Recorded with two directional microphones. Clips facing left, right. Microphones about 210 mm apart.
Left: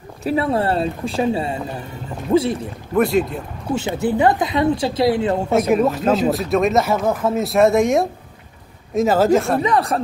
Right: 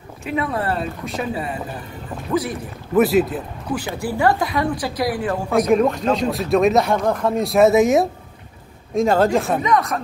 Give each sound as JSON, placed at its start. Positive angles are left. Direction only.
{"t": 0.2, "sound": "speech", "side_deg": 35}
{"t": 2.9, "sound": "speech", "side_deg": -5}
{"t": 3.7, "sound": "speech", "side_deg": 20}
{"t": 5.5, "sound": "speech", "side_deg": 5}
{"t": 9.6, "sound": "speech", "side_deg": 30}